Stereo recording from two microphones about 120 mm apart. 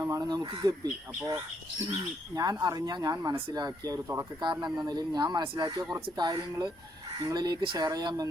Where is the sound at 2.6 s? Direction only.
35° right (ahead or behind).